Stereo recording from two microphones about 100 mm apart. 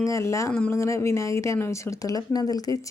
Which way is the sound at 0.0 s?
30° left (ahead or behind).